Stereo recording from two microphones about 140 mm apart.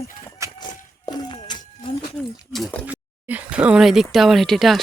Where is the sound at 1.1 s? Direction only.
30° left (ahead or behind).